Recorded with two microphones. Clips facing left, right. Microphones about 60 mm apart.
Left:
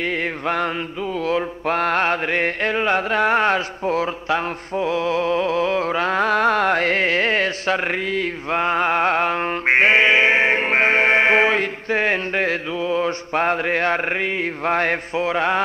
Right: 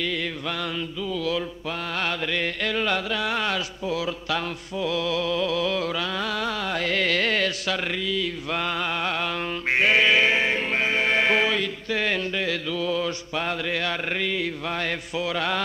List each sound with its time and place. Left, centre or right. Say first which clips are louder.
0.0 s music: left 5 dB; left